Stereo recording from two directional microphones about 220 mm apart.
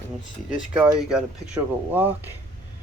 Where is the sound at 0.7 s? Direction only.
5° right (ahead or behind).